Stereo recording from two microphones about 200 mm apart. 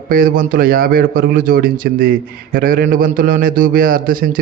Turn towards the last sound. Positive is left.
turn(degrees=-45)  # may be behind; listen again after turning